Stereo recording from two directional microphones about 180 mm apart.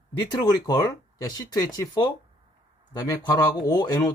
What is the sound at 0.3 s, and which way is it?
Speech, 20° left (ahead or behind).